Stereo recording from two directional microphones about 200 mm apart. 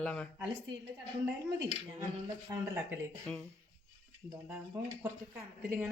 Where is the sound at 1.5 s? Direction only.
20° right (ahead or behind).